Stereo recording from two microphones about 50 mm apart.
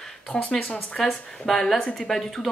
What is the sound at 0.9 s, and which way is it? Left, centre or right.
Speech, centre.